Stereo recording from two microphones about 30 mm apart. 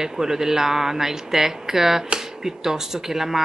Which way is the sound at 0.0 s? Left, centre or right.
Centre.